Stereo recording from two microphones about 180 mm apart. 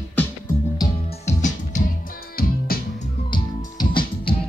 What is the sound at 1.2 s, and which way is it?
Music, 40° left (ahead or behind).